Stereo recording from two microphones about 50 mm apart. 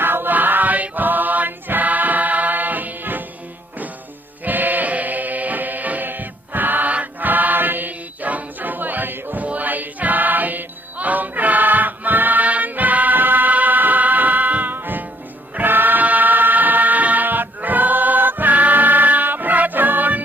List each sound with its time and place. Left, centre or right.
0.0 s music: right
4.4 s music: right